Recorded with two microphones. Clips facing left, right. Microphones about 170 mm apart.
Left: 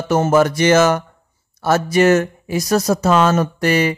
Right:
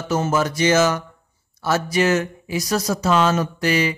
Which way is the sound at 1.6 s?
50° left (ahead or behind).